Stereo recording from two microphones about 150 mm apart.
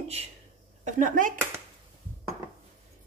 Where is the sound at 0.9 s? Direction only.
60° right (ahead or behind).